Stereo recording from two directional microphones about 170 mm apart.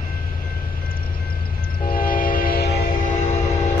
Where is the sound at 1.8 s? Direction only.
55° left (ahead or behind).